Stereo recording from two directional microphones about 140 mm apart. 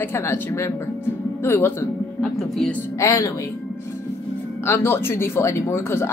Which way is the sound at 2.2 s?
5° left (ahead or behind).